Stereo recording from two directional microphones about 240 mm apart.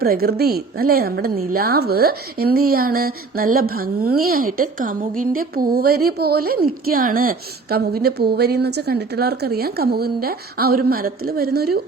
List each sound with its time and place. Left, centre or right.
0.0 s a woman's voice: right